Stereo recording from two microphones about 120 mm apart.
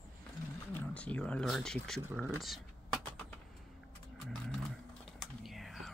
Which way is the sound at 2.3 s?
Centre (ahead or behind).